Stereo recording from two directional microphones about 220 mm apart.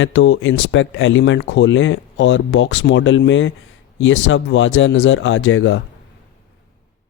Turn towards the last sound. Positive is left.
turn(degrees=60)  # may be behind; listen again after turning